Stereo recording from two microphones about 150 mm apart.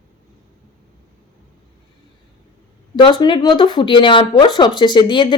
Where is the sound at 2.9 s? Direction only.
30° left (ahead or behind).